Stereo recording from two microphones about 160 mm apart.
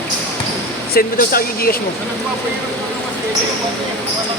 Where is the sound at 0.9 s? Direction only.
65° left (ahead or behind).